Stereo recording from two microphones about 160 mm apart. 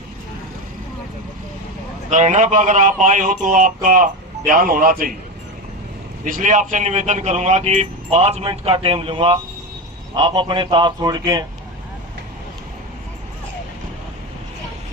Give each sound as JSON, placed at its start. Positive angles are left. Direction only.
{"t": 2.0, "sound": "a man's voice", "side_deg": -50}
{"t": 6.2, "sound": "a man's voice", "side_deg": -55}